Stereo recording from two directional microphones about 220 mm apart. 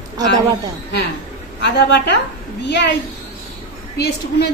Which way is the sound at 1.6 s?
50° left (ahead or behind).